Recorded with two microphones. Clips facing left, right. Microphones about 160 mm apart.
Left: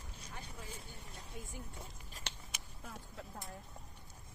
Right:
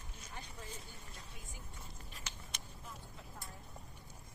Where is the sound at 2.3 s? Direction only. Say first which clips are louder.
Left 3 dB; 65° left (ahead or behind).